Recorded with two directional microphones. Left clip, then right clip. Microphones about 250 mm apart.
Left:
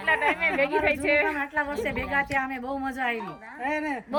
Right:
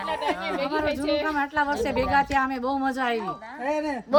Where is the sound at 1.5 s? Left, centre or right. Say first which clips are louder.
Right 4 dB; centre.